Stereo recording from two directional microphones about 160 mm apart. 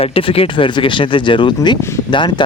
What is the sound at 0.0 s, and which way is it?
Speech, 35° left (ahead or behind).